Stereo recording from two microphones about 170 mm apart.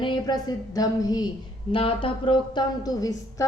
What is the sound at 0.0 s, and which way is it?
Speech, 25° left (ahead or behind).